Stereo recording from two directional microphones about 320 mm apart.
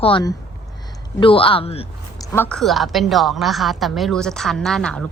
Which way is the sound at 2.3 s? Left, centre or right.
Centre.